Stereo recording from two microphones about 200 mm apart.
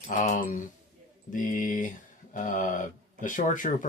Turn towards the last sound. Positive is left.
turn(degrees=40)  # may be behind; listen again after turning